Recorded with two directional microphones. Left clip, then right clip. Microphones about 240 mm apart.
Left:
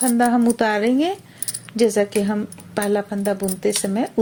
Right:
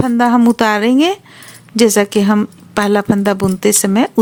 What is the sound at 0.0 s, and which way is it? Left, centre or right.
Speech, right.